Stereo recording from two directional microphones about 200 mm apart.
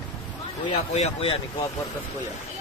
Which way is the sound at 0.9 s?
30° left (ahead or behind).